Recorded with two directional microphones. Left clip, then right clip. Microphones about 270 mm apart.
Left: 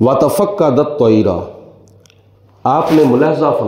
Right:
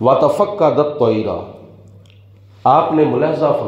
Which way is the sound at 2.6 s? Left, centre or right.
Left.